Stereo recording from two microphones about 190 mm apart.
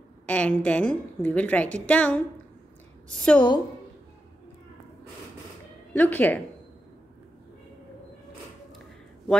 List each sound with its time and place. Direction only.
0.3 s a woman's voice: 5° left (ahead or behind)
3.3 s a woman's voice: 25° left (ahead or behind)
5.9 s a woman's voice: 10° left (ahead or behind)